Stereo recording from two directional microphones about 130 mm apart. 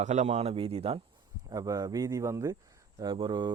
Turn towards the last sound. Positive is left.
turn(degrees=-35)  # may be behind; listen again after turning